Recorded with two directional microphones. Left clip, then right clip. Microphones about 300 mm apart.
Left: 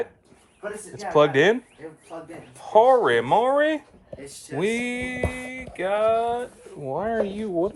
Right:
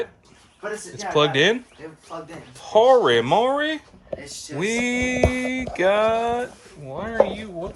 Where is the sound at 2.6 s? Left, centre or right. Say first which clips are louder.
Right 1 dB; centre.